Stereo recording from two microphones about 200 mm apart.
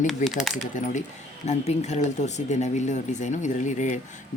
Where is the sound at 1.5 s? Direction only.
35° left (ahead or behind).